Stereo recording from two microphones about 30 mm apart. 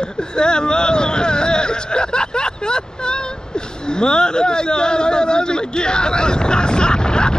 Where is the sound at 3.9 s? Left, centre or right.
Left.